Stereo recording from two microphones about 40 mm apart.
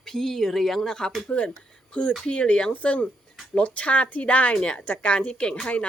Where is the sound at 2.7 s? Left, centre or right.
Left.